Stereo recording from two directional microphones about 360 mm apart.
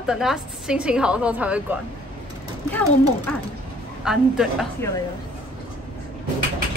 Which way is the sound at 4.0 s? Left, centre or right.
Centre.